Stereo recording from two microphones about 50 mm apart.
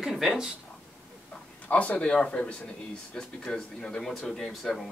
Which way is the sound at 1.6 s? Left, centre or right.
Left.